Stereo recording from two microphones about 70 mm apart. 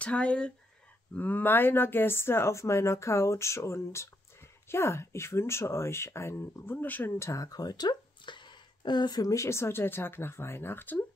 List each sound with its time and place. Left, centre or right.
0.0 s speech: centre
1.1 s speech: left
7.2 s speech: left
7.4 s speech: left
9.3 s speech: left